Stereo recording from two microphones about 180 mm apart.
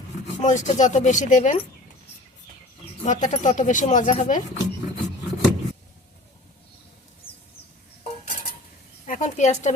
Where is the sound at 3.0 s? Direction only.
40° left (ahead or behind).